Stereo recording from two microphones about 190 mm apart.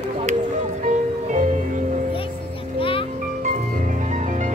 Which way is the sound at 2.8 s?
30° left (ahead or behind).